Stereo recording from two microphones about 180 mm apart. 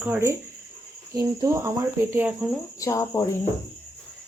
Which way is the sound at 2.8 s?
15° left (ahead or behind).